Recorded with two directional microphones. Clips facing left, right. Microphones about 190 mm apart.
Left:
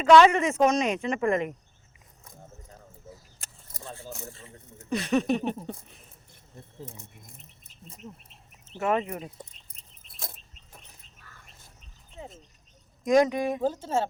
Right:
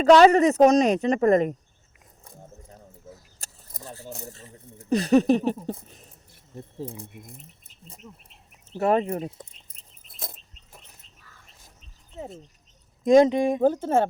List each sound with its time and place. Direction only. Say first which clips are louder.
0.0 s speech: right 3 dB; 40° right (ahead or behind)
3.4 s a sound: right 2 dB; 40° right (ahead or behind)
4.1 s speech: right 2 dB; 40° right (ahead or behind)
8.8 s speech: right 5 dB; 35° right (ahead or behind)
13.1 s speech: right 5 dB; 25° right (ahead or behind)
13.6 s speech: right 6 dB; 55° right (ahead or behind)